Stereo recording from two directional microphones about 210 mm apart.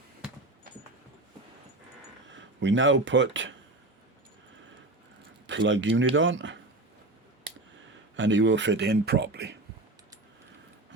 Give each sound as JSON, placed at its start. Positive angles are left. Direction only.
{"t": 2.3, "sound": "speech", "side_deg": -60}
{"t": 5.5, "sound": "speech", "side_deg": -60}
{"t": 8.1, "sound": "speech", "side_deg": -60}